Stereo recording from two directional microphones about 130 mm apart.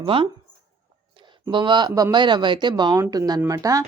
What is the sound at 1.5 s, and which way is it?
Speech, 35° right (ahead or behind).